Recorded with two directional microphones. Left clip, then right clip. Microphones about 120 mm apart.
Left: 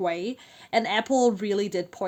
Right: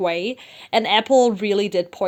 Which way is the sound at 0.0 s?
15° right (ahead or behind).